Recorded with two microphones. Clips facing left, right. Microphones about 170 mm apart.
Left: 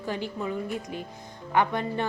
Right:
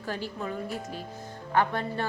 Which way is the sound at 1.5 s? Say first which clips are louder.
Left 2 dB; 15° left (ahead or behind).